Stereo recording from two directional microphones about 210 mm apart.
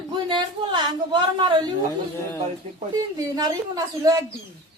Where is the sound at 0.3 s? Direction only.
20° right (ahead or behind).